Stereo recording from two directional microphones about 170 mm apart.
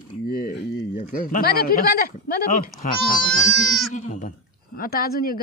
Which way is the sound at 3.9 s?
45° left (ahead or behind).